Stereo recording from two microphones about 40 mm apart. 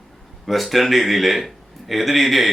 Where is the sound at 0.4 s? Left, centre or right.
Centre.